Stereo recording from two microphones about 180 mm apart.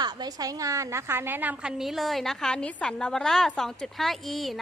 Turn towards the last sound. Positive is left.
turn(degrees=0)  # may be behind; listen again after turning